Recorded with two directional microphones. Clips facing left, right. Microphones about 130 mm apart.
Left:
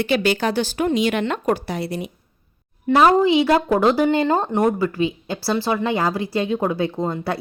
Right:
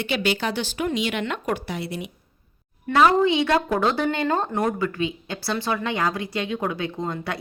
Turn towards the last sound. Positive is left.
turn(degrees=30)  # may be behind; listen again after turning